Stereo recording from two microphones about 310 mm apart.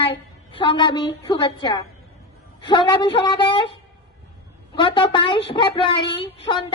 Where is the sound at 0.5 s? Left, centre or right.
Centre.